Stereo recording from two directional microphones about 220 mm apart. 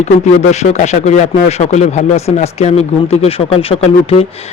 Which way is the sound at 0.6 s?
30° left (ahead or behind).